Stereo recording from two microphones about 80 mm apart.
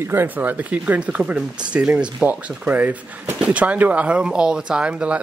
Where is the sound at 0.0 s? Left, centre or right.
Right.